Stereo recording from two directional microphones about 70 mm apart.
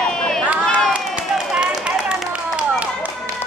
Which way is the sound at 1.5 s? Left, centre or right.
Centre.